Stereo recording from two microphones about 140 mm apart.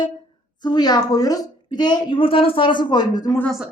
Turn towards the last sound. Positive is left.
turn(degrees=30)  # may be behind; listen again after turning